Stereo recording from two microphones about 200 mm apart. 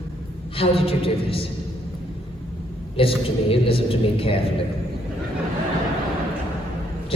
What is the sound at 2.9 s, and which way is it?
A woman's voice, 25° left (ahead or behind).